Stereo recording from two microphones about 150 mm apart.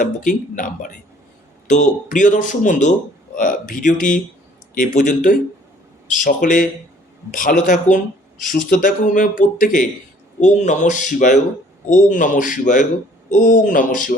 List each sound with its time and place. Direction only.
0.0 s speech: 60° left (ahead or behind)